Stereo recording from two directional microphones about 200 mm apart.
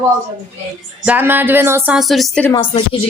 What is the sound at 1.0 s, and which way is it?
Speech, 10° right (ahead or behind).